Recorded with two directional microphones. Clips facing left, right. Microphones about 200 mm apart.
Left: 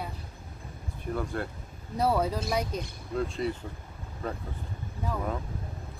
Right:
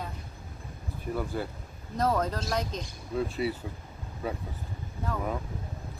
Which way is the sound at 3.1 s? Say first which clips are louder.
Right 1 dB; 5° right (ahead or behind).